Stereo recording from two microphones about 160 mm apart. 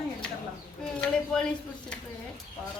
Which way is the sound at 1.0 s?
5° left (ahead or behind).